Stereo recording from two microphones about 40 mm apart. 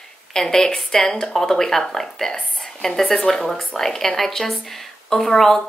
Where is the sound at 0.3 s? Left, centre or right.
Centre.